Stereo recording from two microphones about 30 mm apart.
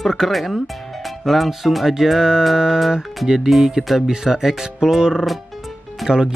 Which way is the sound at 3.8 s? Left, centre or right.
Centre.